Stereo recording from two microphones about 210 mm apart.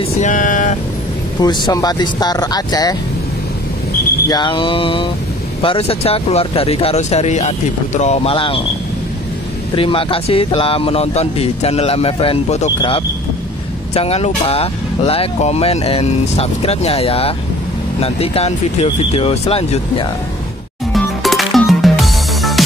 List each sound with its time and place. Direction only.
0.2 s speech: 40° left (ahead or behind)
1.4 s speech: 20° left (ahead or behind)
4.3 s speech: 20° left (ahead or behind)
9.8 s speech: 25° left (ahead or behind)
20.9 s music: centre (ahead or behind)